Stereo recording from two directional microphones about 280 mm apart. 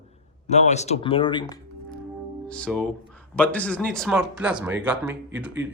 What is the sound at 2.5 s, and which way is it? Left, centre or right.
Speech, centre.